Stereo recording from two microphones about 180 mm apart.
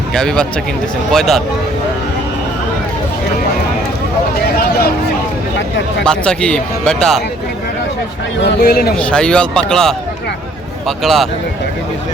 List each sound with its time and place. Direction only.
0.1 s speech: 5° left (ahead or behind)
6.1 s speech: 5° left (ahead or behind)
8.4 s speech: 60° left (ahead or behind)
9.0 s speech: 5° left (ahead or behind)